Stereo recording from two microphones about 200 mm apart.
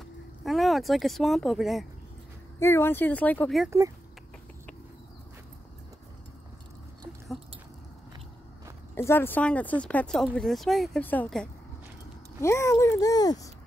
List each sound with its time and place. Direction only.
0.5 s speech: centre (ahead or behind)
2.6 s speech: 10° left (ahead or behind)
8.9 s speech: 10° left (ahead or behind)